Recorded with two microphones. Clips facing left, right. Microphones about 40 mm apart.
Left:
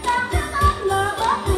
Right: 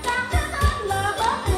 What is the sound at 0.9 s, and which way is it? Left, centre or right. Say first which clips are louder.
Music: left 3 dB; left.